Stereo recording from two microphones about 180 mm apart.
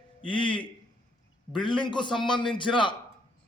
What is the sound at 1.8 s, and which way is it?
Speech, 25° left (ahead or behind).